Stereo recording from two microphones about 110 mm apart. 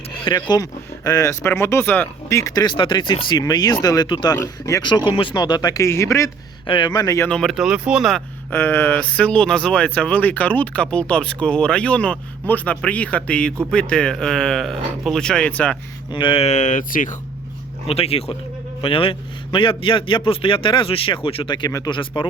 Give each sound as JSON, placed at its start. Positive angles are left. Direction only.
{"t": 0.4, "sound": "speech", "side_deg": 35}
{"t": 2.3, "sound": "speech", "side_deg": 30}
{"t": 2.6, "sound": "a man's voice", "side_deg": 45}
{"t": 4.4, "sound": "speech", "side_deg": 30}
{"t": 4.8, "sound": "speech", "side_deg": 45}
{"t": 6.7, "sound": "speech", "side_deg": 45}
{"t": 7.3, "sound": "speech", "side_deg": 5}
{"t": 7.5, "sound": "speech", "side_deg": -5}
{"t": 8.4, "sound": "speech", "side_deg": 20}
{"t": 16.1, "sound": "a man's voice", "side_deg": 55}
{"t": 17.8, "sound": "a man's voice", "side_deg": 65}